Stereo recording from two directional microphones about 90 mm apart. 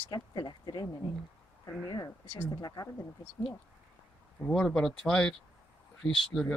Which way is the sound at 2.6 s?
40° left (ahead or behind).